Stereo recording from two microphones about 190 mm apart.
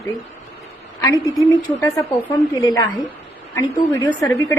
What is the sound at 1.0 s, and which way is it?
A woman's voice, 15° left (ahead or behind).